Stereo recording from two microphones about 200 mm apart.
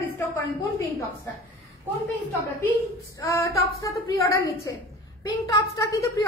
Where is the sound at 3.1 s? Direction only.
15° left (ahead or behind).